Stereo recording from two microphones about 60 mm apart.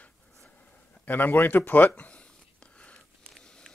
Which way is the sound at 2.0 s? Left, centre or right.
Left.